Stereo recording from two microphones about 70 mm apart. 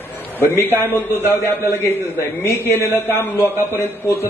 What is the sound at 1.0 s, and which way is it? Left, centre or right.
Speech, right.